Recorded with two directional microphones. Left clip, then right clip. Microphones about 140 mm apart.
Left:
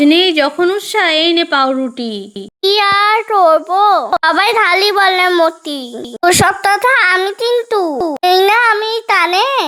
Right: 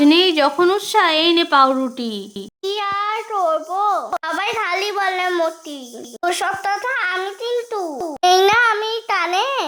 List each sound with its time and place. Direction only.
0.0 s a woman's voice: 15° left (ahead or behind)
2.6 s a child's voice: 50° left (ahead or behind)
8.2 s a child's voice: 20° left (ahead or behind)